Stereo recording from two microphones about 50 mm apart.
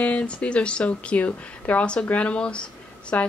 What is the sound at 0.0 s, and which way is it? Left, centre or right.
Speech, left.